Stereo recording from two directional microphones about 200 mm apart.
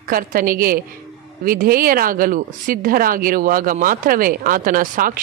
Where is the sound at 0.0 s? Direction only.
45° right (ahead or behind).